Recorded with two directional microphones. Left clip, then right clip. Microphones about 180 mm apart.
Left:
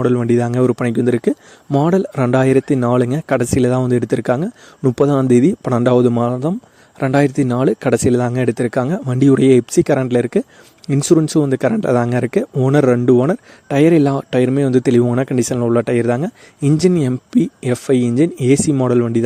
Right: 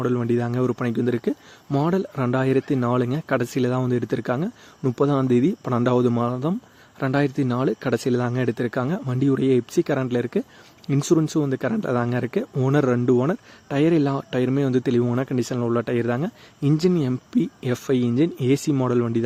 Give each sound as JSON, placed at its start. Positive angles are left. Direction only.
{"t": 0.0, "sound": "speech", "side_deg": 40}